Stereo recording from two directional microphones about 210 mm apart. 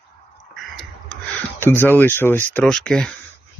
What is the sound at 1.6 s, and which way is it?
Speech, 10° left (ahead or behind).